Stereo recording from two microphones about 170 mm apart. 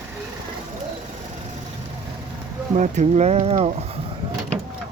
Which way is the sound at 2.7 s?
45° right (ahead or behind).